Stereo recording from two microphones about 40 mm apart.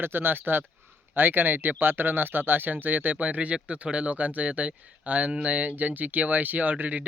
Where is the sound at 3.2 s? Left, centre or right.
Right.